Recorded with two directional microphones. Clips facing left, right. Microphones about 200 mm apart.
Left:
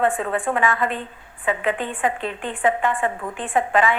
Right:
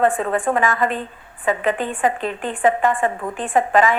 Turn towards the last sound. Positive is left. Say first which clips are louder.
# right 3 dB
turn(degrees=-45)  # may be behind; listen again after turning